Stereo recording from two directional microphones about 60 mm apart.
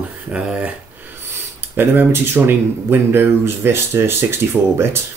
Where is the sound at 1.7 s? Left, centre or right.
Right.